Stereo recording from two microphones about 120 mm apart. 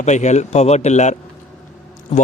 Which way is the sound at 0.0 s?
75° left (ahead or behind).